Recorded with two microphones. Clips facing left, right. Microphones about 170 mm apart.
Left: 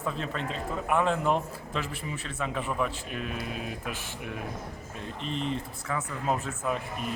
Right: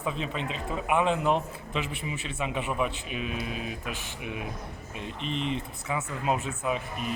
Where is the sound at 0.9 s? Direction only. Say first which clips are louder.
Right 1 dB; centre (ahead or behind).